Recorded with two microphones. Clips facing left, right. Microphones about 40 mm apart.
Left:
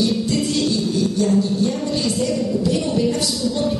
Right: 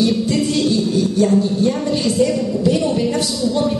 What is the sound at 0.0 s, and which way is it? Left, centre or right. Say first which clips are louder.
Music: right 3 dB; centre.